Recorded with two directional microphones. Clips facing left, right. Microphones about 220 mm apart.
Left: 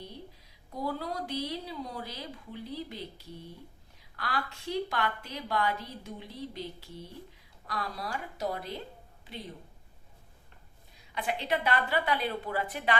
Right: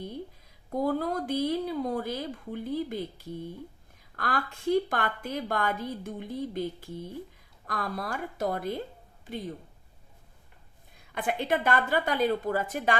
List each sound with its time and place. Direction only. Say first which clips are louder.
0.7 s a woman's voice: right 7 dB; 50° right (ahead or behind)
10.9 s a woman's voice: right 4 dB; 50° right (ahead or behind)